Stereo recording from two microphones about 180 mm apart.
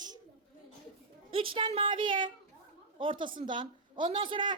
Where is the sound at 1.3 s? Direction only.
30° right (ahead or behind).